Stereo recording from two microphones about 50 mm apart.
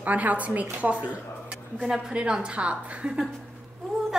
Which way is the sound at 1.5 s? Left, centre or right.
Centre.